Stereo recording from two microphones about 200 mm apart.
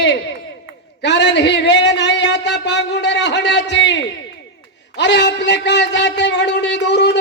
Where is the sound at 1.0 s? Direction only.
60° left (ahead or behind).